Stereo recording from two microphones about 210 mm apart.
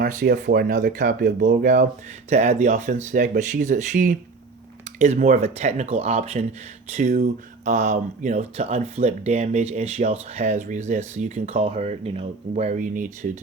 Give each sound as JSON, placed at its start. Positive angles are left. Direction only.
{"t": 0.0, "sound": "speech", "side_deg": -40}